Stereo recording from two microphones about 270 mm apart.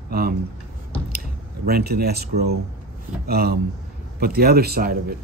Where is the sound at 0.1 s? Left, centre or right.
Right.